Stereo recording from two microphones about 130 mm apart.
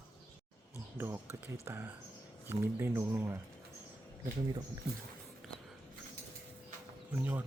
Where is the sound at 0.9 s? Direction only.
20° right (ahead or behind).